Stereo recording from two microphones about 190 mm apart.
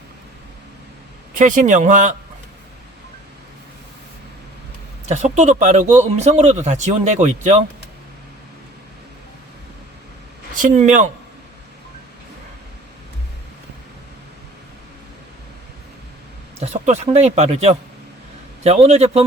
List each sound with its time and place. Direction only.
1.4 s speech: 40° right (ahead or behind)
5.0 s speech: 35° right (ahead or behind)
10.5 s speech: 45° right (ahead or behind)
16.6 s speech: 35° right (ahead or behind)